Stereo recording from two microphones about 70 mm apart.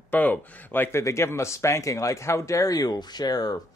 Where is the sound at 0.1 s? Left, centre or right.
Left.